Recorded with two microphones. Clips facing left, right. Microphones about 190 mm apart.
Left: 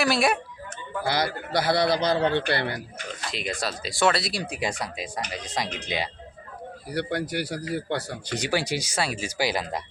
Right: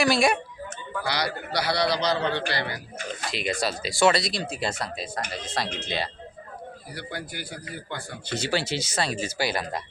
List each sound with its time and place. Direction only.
0.0 s speech: centre (ahead or behind)
1.0 s a man's voice: 50° left (ahead or behind)
3.3 s speech: centre (ahead or behind); by 6.1 s 15° left (ahead or behind)
6.9 s speech: 70° left (ahead or behind)
8.3 s speech: 15° left (ahead or behind)